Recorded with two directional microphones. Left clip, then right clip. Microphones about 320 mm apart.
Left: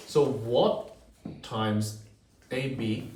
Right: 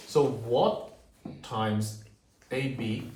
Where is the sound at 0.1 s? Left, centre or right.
Centre.